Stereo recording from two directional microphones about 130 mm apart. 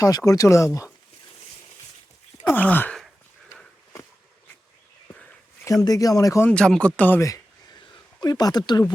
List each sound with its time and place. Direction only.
0.0 s speech: 25° left (ahead or behind)
2.4 s a sound: 10° left (ahead or behind)
5.6 s speech: 25° left (ahead or behind)
6.5 s speech: 5° left (ahead or behind)
7.2 s speech: 20° left (ahead or behind)